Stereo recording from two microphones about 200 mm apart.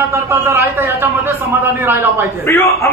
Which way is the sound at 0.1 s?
10° right (ahead or behind).